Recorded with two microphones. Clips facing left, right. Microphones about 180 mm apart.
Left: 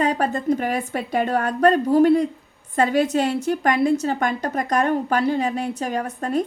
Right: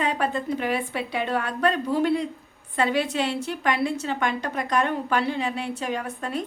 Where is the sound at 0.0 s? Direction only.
40° left (ahead or behind).